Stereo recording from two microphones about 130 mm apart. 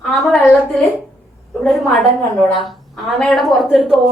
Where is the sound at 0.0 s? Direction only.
Centre (ahead or behind).